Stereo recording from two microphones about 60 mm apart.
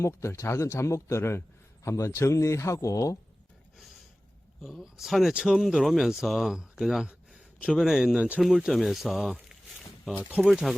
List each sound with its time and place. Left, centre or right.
0.0 s a man's voice: left
4.6 s speech: centre
8.7 s a sound: centre
10.2 s speech: right
10.5 s speech: centre